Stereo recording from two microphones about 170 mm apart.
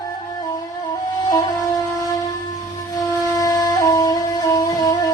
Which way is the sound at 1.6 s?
20° left (ahead or behind).